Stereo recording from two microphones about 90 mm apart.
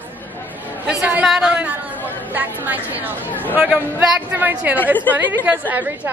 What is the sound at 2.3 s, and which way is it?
A woman's voice, 20° right (ahead or behind).